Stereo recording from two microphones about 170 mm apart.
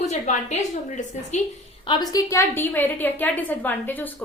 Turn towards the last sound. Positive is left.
turn(degrees=10)  # may be behind; listen again after turning